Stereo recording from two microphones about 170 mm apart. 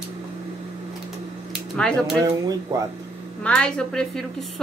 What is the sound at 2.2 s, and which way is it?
Speech, 20° right (ahead or behind).